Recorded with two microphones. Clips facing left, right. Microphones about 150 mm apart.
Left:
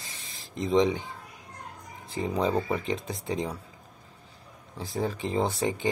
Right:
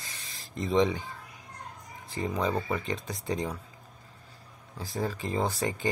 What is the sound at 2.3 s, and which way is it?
Speech, 25° left (ahead or behind).